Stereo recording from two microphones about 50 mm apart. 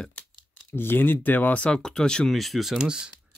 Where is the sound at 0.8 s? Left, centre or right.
Left.